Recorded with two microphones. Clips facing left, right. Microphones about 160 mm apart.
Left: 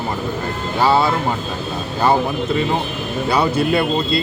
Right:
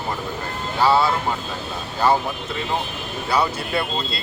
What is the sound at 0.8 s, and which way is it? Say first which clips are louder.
Speech: left 2 dB; 20° left (ahead or behind).